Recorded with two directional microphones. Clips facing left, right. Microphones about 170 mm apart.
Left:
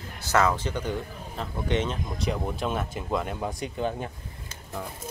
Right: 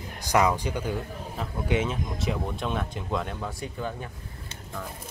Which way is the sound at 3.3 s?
20° left (ahead or behind).